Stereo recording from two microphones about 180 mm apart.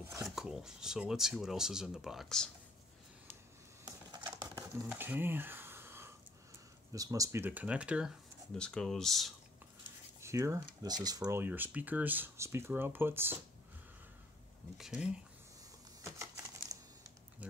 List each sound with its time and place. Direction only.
0.4 s speech: centre (ahead or behind)
3.8 s a sound: 20° right (ahead or behind)
6.9 s speech: 20° right (ahead or behind); by 9.3 s centre (ahead or behind)
10.2 s speech: 15° right (ahead or behind)
14.8 s speech: 5° right (ahead or behind)
16.0 s a sound: 15° right (ahead or behind)